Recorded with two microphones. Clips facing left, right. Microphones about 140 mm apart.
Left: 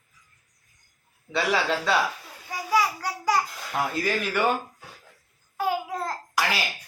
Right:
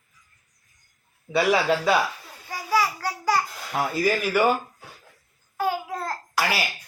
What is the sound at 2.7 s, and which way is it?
Child singing, 15° left (ahead or behind).